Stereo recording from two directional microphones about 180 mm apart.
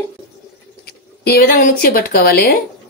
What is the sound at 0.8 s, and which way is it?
Speech, 60° left (ahead or behind).